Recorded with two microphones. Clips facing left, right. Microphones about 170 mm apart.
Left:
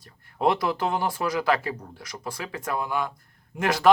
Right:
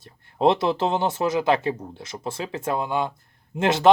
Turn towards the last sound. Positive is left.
turn(degrees=-25)  # may be behind; listen again after turning